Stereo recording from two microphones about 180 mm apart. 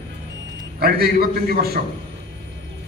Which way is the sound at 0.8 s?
55° right (ahead or behind).